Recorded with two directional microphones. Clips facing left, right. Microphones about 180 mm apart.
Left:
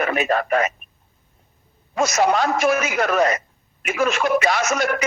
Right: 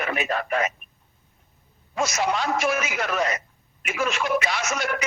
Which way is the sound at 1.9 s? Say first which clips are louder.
Left 6 dB; 45° left (ahead or behind).